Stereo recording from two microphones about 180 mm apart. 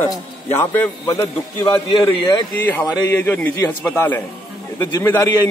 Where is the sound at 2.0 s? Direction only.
10° left (ahead or behind).